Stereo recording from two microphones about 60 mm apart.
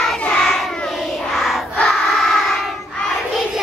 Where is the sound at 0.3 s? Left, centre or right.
Centre.